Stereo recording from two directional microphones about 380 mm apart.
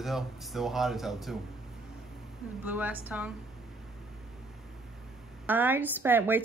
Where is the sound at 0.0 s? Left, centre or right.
Centre.